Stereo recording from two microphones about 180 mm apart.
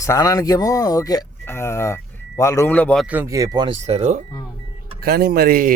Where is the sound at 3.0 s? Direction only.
10° right (ahead or behind).